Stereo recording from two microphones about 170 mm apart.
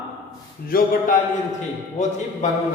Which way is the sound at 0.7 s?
60° left (ahead or behind).